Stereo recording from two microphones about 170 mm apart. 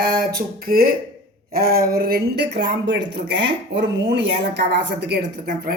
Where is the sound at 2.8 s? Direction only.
90° right.